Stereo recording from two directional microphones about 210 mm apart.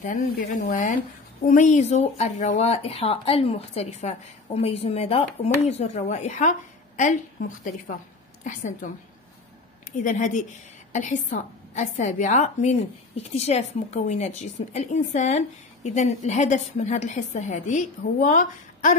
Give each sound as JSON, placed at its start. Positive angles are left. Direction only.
{"t": 0.0, "sound": "a woman's voice", "side_deg": 35}
{"t": 8.8, "sound": "a woman's voice", "side_deg": 40}
{"t": 10.0, "sound": "a woman's voice", "side_deg": 35}